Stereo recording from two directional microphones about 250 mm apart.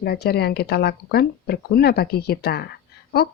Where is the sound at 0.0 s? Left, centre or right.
Left.